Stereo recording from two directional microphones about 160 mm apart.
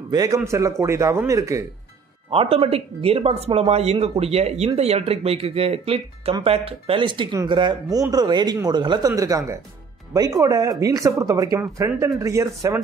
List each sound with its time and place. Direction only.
0.1 s speech: 25° right (ahead or behind)
2.3 s speech: 35° right (ahead or behind); by 12.8 s 20° right (ahead or behind)